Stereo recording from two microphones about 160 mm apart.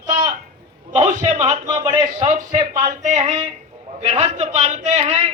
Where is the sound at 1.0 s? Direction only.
50° right (ahead or behind).